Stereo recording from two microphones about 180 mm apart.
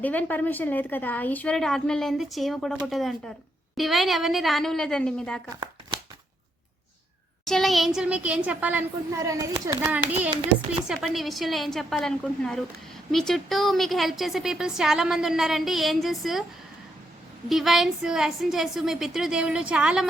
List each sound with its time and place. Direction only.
0.0 s a woman's voice: 10° left (ahead or behind)
7.4 s a woman's voice: centre (ahead or behind)
9.2 s a child's voice: 20° right (ahead or behind); by 16.4 s centre (ahead or behind)
17.5 s a woman's voice: centre (ahead or behind)